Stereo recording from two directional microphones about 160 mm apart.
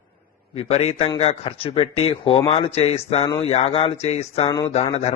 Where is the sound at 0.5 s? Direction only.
40° left (ahead or behind).